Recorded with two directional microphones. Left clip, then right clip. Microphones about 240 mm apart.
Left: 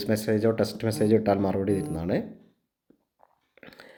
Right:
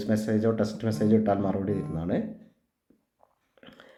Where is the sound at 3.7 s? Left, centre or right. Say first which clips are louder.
Left 3 dB; left.